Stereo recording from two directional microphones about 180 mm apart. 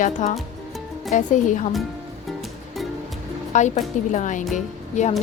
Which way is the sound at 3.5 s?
40° left (ahead or behind).